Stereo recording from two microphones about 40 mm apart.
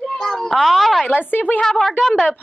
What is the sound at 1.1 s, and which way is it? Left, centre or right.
Speech, left.